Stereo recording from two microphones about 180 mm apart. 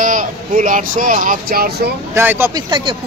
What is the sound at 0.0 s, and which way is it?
Speech, 45° right (ahead or behind).